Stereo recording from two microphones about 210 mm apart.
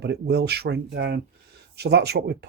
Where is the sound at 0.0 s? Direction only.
50° right (ahead or behind).